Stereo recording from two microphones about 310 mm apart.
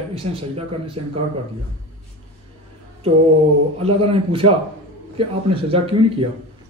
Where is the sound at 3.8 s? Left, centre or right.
Centre.